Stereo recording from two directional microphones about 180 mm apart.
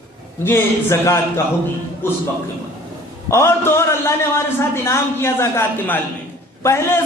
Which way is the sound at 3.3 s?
15° left (ahead or behind).